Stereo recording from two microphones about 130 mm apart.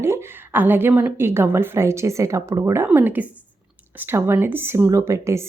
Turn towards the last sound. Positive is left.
turn(degrees=-20)  # may be behind; listen again after turning